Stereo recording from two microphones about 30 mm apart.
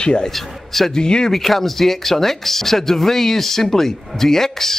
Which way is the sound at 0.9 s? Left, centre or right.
Left.